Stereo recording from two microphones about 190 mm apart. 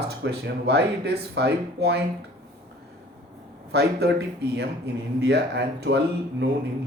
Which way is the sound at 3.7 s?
60° right (ahead or behind).